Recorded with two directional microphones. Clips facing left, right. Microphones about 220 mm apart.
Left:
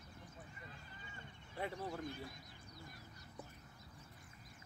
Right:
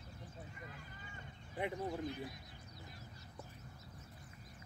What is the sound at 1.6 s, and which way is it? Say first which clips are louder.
Speech: right 4 dB; 15° right (ahead or behind).